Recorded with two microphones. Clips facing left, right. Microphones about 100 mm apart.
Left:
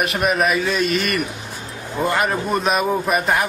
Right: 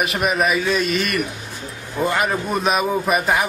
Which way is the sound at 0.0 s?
Centre (ahead or behind).